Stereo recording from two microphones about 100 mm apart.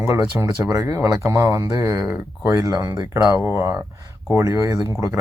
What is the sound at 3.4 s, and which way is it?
Speech, 25° right (ahead or behind).